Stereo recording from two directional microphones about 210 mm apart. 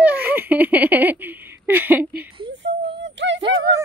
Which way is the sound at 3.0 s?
60° right (ahead or behind).